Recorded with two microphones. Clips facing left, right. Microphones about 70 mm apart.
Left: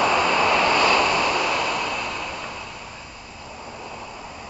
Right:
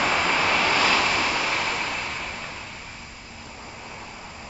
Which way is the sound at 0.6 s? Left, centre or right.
Left.